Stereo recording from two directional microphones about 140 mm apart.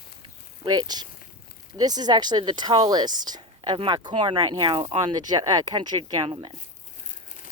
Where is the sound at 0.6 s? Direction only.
30° right (ahead or behind).